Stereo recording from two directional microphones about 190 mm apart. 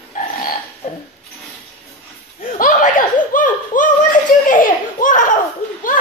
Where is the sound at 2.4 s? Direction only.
45° left (ahead or behind).